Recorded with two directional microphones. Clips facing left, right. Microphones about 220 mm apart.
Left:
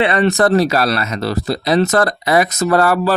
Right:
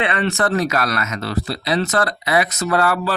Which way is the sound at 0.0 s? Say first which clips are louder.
Left 6 dB; 40° left (ahead or behind).